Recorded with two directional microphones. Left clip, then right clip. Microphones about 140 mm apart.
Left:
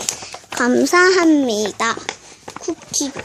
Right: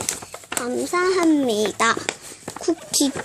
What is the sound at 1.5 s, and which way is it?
Speech, centre (ahead or behind).